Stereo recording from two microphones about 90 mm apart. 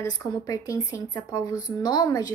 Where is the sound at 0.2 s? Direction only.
35° left (ahead or behind).